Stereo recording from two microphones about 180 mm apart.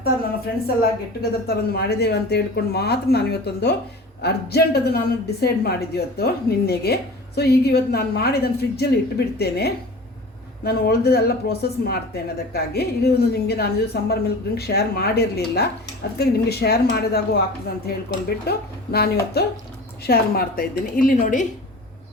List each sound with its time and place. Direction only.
0.0 s a woman's voice: 60° left (ahead or behind)